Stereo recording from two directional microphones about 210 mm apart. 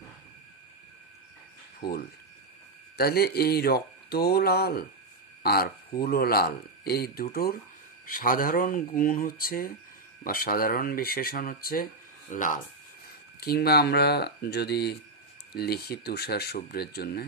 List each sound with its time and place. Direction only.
1.8 s speech: 45° left (ahead or behind)